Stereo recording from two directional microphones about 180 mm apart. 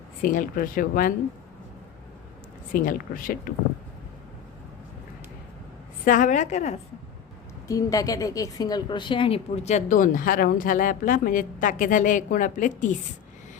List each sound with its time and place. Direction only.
0.2 s a woman's voice: 50° left (ahead or behind)
2.7 s a woman's voice: 50° left (ahead or behind)
6.1 s a woman's voice: 45° left (ahead or behind)
7.7 s a woman's voice: 20° left (ahead or behind); by 13.0 s 45° left (ahead or behind)